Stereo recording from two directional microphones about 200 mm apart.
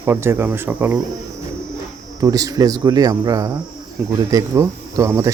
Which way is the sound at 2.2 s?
15° right (ahead or behind).